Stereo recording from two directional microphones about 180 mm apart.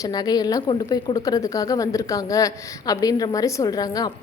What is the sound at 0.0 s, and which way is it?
A woman's voice, 20° left (ahead or behind).